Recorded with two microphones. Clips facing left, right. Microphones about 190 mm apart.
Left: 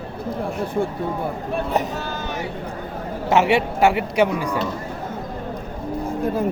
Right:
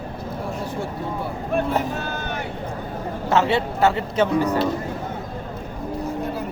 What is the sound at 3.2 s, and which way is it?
A man's voice, 15° left (ahead or behind).